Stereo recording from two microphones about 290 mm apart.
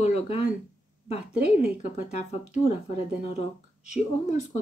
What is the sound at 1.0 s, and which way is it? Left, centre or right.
Speech, left.